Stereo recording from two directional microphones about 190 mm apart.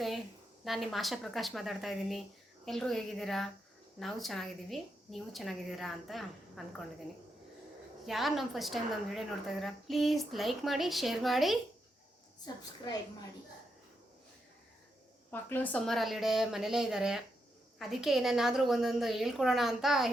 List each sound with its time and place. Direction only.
0.6 s a woman's voice: centre (ahead or behind)
8.0 s a woman's voice: centre (ahead or behind)
12.5 s a woman's voice: 20° left (ahead or behind)
15.3 s a woman's voice: 10° left (ahead or behind)